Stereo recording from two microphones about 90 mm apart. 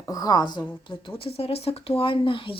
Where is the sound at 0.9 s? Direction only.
80° left.